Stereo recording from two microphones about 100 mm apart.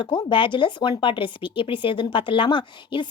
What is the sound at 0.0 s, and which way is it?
Speech, 50° left (ahead or behind).